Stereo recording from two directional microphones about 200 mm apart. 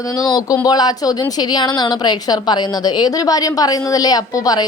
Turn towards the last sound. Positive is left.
turn(degrees=20)  # may be behind; listen again after turning